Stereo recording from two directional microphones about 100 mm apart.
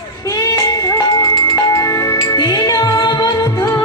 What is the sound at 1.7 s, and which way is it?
Music, 35° left (ahead or behind).